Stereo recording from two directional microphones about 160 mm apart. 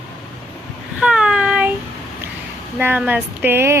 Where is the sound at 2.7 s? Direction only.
10° right (ahead or behind).